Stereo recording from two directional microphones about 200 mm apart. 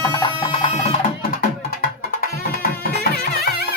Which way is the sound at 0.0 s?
20° left (ahead or behind).